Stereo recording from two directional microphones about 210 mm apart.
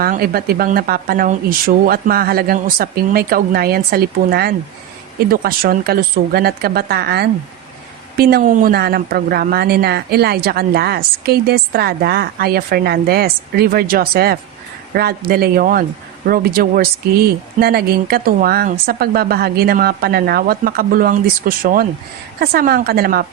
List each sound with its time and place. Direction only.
0.0 s speech: 45° right (ahead or behind)